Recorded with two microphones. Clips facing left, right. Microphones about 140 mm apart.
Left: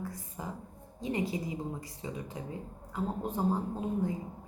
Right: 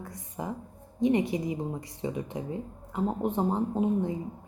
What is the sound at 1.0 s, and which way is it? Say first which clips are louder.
Speech: right 8 dB; 20° right (ahead or behind).